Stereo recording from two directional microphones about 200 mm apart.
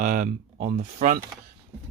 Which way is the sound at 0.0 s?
40° right (ahead or behind).